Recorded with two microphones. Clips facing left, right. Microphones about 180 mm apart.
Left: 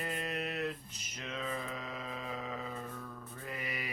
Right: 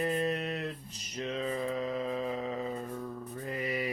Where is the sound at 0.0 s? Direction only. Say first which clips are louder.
Right 7 dB; 30° right (ahead or behind).